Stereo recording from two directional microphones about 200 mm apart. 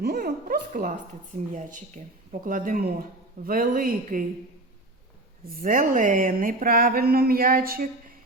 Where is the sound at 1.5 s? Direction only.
40° right (ahead or behind).